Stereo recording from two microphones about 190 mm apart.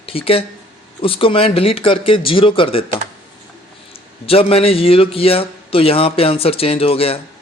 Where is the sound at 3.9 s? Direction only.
30° left (ahead or behind).